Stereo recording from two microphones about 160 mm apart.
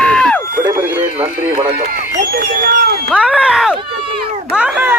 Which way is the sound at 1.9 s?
60° right (ahead or behind).